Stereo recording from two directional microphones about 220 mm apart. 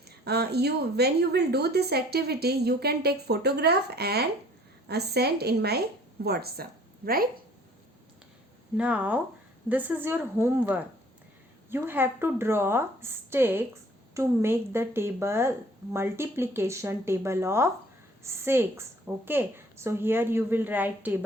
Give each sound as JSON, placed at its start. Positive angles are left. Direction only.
{"t": 0.3, "sound": "a woman's voice", "side_deg": -45}
{"t": 8.8, "sound": "speech", "side_deg": -5}